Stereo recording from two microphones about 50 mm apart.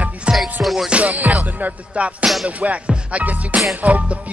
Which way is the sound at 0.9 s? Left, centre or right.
Right.